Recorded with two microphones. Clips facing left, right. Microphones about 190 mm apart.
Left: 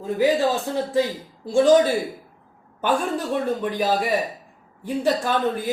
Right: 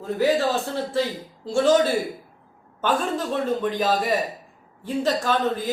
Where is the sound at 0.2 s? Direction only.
15° left (ahead or behind).